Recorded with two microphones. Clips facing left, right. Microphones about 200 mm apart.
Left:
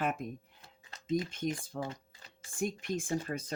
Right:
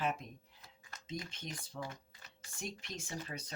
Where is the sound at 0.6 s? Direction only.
30° left (ahead or behind).